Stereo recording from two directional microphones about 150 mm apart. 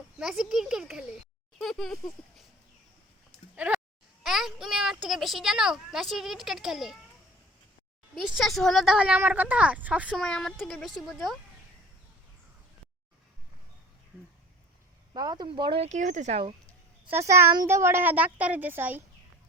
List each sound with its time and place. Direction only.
0.2 s speech: 5° right (ahead or behind)
1.5 s a sound: centre (ahead or behind)
3.5 s a sound: 10° right (ahead or behind)
4.2 s a child's voice: centre (ahead or behind)
8.4 s a woman's voice: centre (ahead or behind)
10.2 s speech: 5° left (ahead or behind)
15.1 s speech: 25° right (ahead or behind)
15.8 s speech: 55° right (ahead or behind)
17.1 s a woman's voice: 15° right (ahead or behind)